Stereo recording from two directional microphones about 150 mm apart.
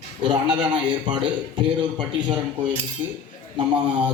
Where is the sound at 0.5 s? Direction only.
30° right (ahead or behind).